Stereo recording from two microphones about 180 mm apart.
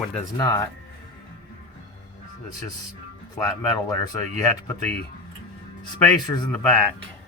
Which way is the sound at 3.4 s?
20° left (ahead or behind).